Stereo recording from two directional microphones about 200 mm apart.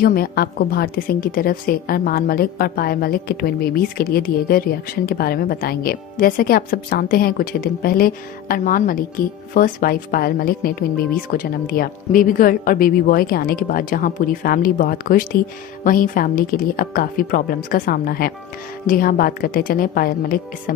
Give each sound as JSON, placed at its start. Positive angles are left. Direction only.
{"t": 0.0, "sound": "a woman's voice", "side_deg": 50}